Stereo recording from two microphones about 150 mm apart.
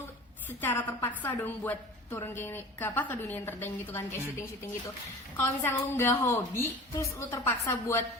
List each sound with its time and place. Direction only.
0.6 s a woman's voice: 15° left (ahead or behind)